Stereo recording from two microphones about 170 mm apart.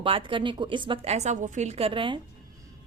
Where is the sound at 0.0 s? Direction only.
30° right (ahead or behind).